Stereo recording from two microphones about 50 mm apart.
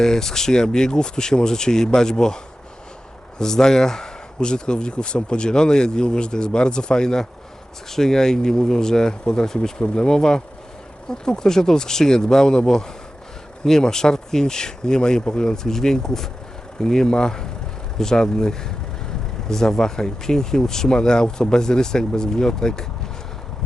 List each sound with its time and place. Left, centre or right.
0.0 s speech: centre